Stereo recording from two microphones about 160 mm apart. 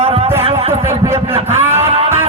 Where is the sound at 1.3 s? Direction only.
40° right (ahead or behind).